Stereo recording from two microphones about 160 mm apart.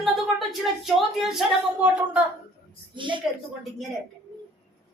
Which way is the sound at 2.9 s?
30° right (ahead or behind).